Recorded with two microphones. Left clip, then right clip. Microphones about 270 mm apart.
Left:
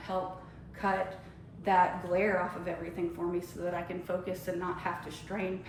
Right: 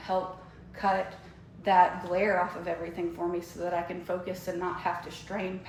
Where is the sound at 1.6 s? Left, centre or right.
Right.